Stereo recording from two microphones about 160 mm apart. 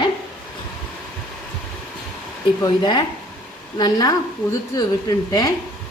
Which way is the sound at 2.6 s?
30° left (ahead or behind).